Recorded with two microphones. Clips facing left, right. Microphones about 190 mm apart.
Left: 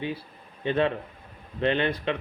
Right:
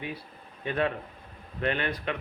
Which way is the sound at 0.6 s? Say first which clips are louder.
Left 4 dB; 30° left (ahead or behind).